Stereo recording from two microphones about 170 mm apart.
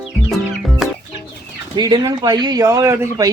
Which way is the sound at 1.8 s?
25° right (ahead or behind).